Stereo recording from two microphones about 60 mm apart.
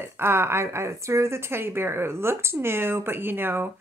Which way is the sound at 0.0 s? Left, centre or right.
Right.